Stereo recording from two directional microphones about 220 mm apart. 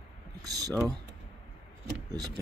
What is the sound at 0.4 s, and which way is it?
Speech, 15° right (ahead or behind).